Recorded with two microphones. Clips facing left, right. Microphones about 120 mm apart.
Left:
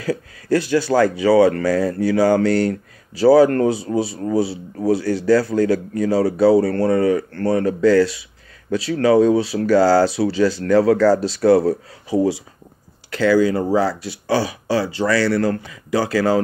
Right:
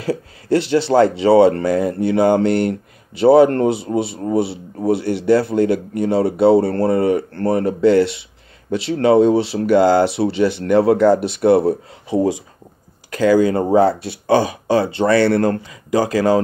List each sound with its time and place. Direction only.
0.0 s speech: 25° right (ahead or behind)
13.7 s speech: 55° right (ahead or behind)
16.1 s speech: 20° right (ahead or behind)